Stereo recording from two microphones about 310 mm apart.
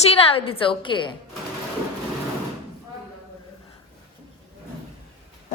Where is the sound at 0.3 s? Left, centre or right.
Centre.